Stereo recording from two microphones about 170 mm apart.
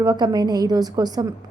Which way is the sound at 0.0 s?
25° right (ahead or behind).